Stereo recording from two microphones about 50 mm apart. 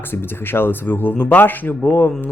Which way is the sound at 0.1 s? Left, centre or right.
Left.